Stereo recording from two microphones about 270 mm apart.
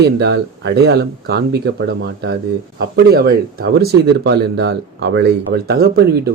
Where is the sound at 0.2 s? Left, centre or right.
Right.